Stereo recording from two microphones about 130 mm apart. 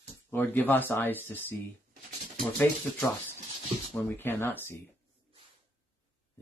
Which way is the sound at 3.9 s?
15° left (ahead or behind).